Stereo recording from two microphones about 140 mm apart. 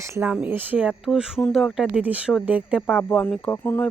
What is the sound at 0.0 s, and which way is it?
Speech, 20° right (ahead or behind).